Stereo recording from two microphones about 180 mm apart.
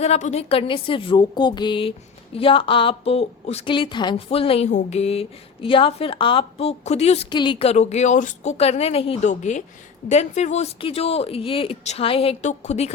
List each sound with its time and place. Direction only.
0.0 s a woman's voice: 40° left (ahead or behind)